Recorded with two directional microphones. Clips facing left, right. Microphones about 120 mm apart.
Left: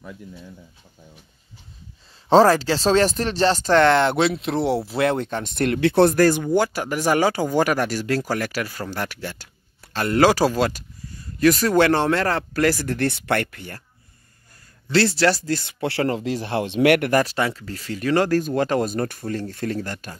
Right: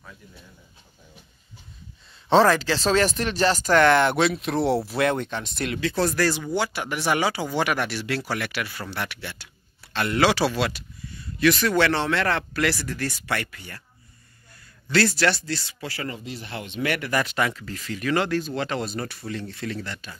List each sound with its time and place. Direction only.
2.2 s speech: 35° left (ahead or behind)
5.3 s speech: 55° left (ahead or behind)
14.9 s speech: 30° left (ahead or behind); by 17.1 s 70° left (ahead or behind)
17.1 s speech: 35° left (ahead or behind)